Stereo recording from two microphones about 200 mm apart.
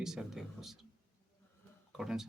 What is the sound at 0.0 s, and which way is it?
Speech, centre (ahead or behind).